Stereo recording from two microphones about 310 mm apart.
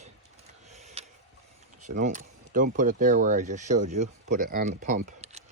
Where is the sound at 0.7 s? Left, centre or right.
Right.